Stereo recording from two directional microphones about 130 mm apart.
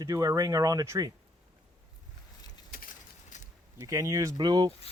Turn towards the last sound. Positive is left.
turn(degrees=-30)  # may be behind; listen again after turning